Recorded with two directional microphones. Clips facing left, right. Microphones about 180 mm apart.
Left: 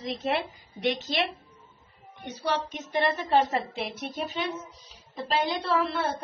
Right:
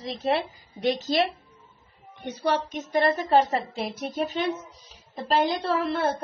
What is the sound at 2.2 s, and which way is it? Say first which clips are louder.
A woman's voice: right 4 dB; 50° right (ahead or behind).